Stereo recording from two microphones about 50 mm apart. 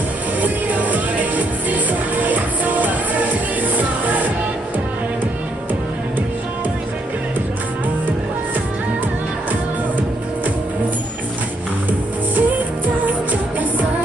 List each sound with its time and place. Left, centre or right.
0.4 s music: right
12.4 s music: right